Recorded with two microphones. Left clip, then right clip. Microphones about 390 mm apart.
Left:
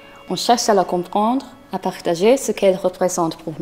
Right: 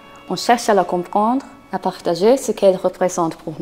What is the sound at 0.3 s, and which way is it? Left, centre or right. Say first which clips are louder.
A woman's voice: even; centre.